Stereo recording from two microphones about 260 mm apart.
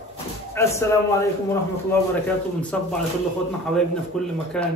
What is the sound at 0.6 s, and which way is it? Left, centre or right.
A man's voice, centre.